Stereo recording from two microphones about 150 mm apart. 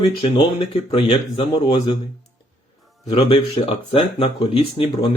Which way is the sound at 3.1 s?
40° left (ahead or behind).